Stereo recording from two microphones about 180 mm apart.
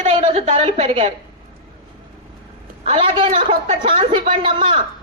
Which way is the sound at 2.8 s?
30° right (ahead or behind).